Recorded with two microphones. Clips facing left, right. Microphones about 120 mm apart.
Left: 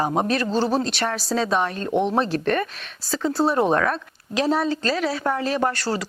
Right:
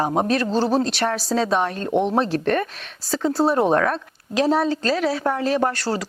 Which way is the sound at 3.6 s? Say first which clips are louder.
Right 1 dB; 35° right (ahead or behind).